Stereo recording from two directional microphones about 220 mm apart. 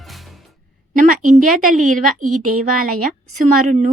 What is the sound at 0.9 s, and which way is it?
Speech, 40° right (ahead or behind).